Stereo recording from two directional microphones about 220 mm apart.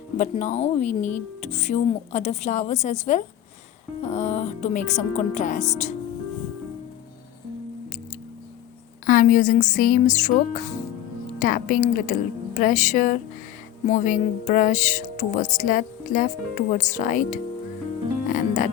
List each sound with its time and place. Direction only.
0.2 s speech: 30° left (ahead or behind)
9.0 s speech: 40° left (ahead or behind)
18.3 s music: 40° left (ahead or behind)